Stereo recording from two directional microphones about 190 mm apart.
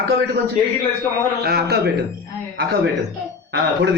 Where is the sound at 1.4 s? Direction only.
55° right (ahead or behind).